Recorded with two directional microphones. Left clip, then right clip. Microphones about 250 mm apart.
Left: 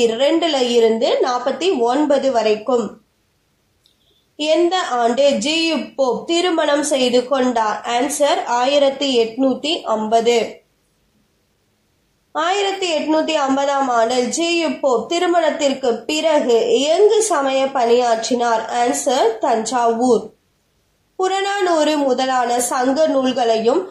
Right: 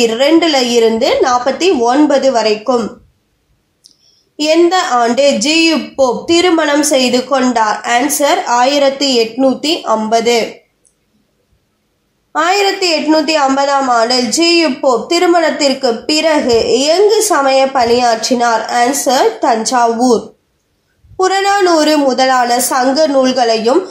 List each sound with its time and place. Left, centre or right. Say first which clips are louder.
0.0 s a woman's voice: right 6 dB; right
4.4 s a woman's voice: right 6 dB; right
12.3 s a woman's voice: right 7 dB; right
21.2 s a woman's voice: right 7 dB; right